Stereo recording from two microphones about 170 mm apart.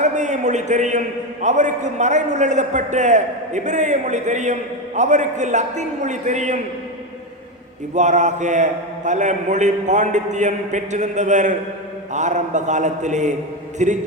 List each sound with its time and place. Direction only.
0.0 s a man's voice: 45° right (ahead or behind)
7.9 s a man's voice: 45° right (ahead or behind)